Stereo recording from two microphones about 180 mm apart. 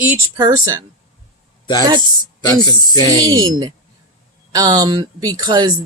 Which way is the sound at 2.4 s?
20° left (ahead or behind).